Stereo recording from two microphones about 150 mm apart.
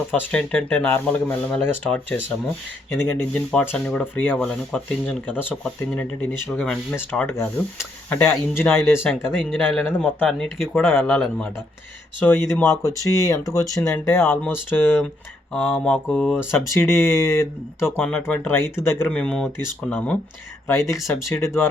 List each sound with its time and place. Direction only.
0.1 s speech: 10° left (ahead or behind)
9.0 s speech: 5° right (ahead or behind)
9.6 s speech: 10° left (ahead or behind)
12.8 s speech: 20° left (ahead or behind)
15.5 s speech: centre (ahead or behind)
20.7 s speech: 20° left (ahead or behind)